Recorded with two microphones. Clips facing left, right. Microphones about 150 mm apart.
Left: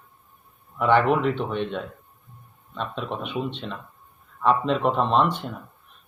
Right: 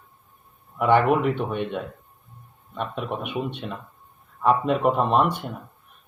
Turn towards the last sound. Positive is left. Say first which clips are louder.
# even
turn(degrees=-10)  # may be behind; listen again after turning